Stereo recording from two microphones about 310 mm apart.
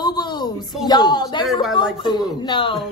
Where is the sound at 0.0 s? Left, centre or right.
Centre.